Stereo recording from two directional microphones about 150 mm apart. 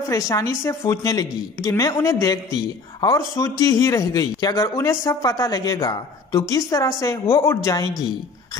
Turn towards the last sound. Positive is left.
turn(degrees=25)  # may be behind; listen again after turning